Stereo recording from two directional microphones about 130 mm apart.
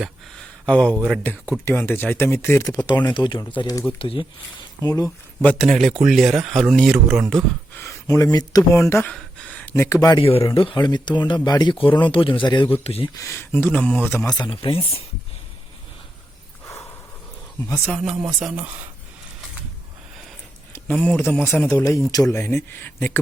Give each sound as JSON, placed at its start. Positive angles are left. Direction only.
{"t": 0.0, "sound": "a sound", "side_deg": 5}
{"t": 1.2, "sound": "speech", "side_deg": 15}
{"t": 3.9, "sound": "speech", "side_deg": 45}
{"t": 4.8, "sound": "speech", "side_deg": 25}
{"t": 5.5, "sound": "speech", "side_deg": 0}
{"t": 7.8, "sound": "speech", "side_deg": 20}
{"t": 9.0, "sound": "a sound", "side_deg": 10}
{"t": 10.2, "sound": "speech", "side_deg": 45}
{"t": 13.1, "sound": "speech", "side_deg": 20}
{"t": 14.3, "sound": "speech", "side_deg": 30}
{"t": 17.7, "sound": "speech", "side_deg": 20}
{"t": 17.9, "sound": "speech", "side_deg": 0}
{"t": 20.7, "sound": "speech", "side_deg": 10}